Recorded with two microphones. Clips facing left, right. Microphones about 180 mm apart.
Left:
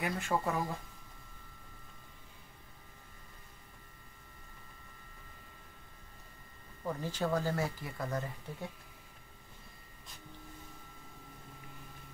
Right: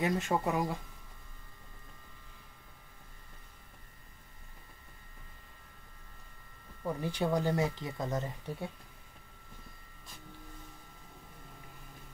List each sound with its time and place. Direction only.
0.0 s speech: 20° right (ahead or behind)
6.8 s speech: 15° right (ahead or behind)